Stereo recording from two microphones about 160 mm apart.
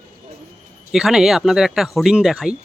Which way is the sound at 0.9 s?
5° right (ahead or behind).